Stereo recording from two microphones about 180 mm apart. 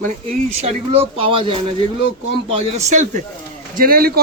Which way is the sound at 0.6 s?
30° right (ahead or behind).